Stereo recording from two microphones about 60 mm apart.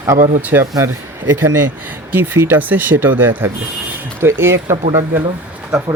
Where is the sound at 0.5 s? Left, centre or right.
Right.